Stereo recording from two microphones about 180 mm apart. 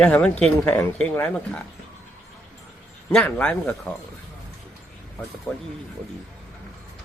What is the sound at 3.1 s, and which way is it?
Speech, 5° left (ahead or behind).